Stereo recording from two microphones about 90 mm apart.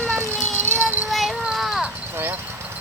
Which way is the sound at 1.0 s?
Centre (ahead or behind).